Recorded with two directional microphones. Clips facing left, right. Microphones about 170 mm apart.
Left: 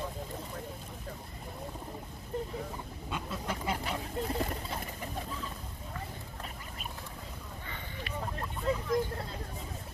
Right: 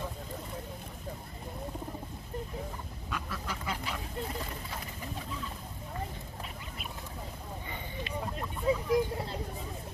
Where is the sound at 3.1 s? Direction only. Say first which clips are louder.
Left 2 dB; 25° left (ahead or behind).